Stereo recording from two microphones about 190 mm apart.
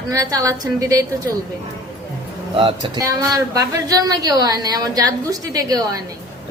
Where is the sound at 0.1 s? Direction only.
20° right (ahead or behind).